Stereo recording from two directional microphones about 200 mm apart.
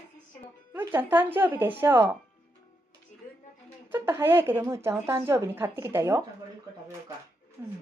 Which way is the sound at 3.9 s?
10° right (ahead or behind).